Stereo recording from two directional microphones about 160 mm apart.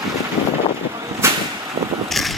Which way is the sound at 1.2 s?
15° right (ahead or behind).